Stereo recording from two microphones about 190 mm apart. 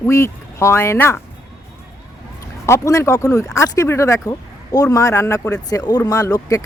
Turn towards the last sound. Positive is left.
turn(degrees=20)  # may be behind; listen again after turning